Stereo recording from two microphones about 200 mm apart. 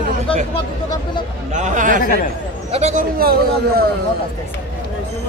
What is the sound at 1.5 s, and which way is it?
Speech, 40° right (ahead or behind).